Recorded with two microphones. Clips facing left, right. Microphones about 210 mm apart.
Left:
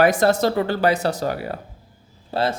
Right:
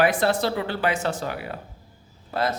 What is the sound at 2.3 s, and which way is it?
Speech, 30° left (ahead or behind).